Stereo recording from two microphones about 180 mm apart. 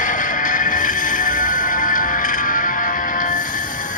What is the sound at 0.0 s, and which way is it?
Music, 45° left (ahead or behind).